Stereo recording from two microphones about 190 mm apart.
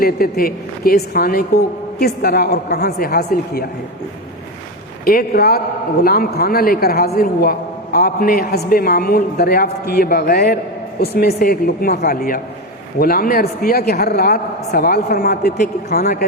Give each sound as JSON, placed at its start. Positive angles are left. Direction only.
{"t": 0.0, "sound": "a woman's voice", "side_deg": 50}
{"t": 5.0, "sound": "a man's voice", "side_deg": 55}